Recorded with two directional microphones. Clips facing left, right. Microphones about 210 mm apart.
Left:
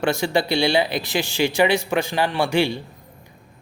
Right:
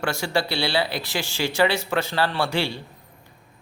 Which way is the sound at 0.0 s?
20° left (ahead or behind).